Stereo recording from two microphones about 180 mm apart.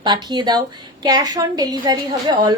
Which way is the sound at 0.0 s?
25° right (ahead or behind).